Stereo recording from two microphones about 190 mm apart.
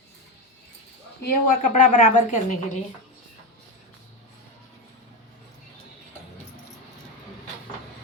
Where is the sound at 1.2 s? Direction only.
45° left (ahead or behind).